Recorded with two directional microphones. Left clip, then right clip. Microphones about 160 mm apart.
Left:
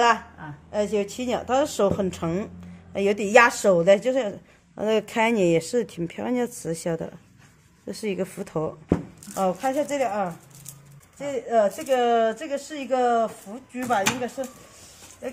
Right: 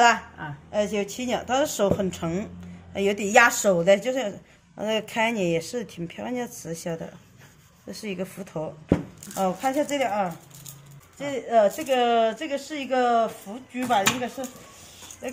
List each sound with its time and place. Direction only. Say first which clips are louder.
0.7 s speech: left 1 dB; 20° left (ahead or behind); by 8.6 s 45° left (ahead or behind)
9.3 s speech: left 1 dB; 25° left (ahead or behind); by 13.9 s centre (ahead or behind)
13.9 s speech: right 1 dB; 15° left (ahead or behind)